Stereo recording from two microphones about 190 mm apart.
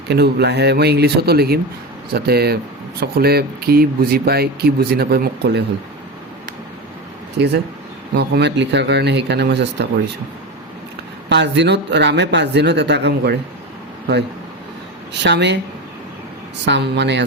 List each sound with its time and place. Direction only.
0.1 s speech: 60° right (ahead or behind)
7.3 s speech: 60° right (ahead or behind)
11.3 s speech: 65° right (ahead or behind)
15.2 s speech: 65° right (ahead or behind)
16.6 s speech: 65° right (ahead or behind)